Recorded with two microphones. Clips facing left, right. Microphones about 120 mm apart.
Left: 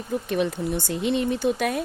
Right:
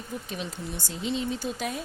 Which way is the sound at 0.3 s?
60° left (ahead or behind).